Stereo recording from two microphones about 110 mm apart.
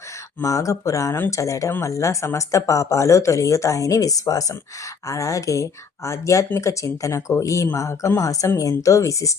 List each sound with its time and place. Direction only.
0.4 s speech: 30° left (ahead or behind)